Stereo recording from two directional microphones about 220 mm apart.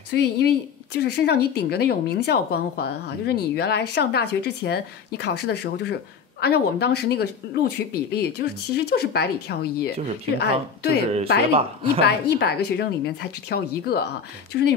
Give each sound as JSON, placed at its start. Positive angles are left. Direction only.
{"t": 0.1, "sound": "speech", "side_deg": 50}
{"t": 11.5, "sound": "speech", "side_deg": -25}
{"t": 12.0, "sound": "speech", "side_deg": 50}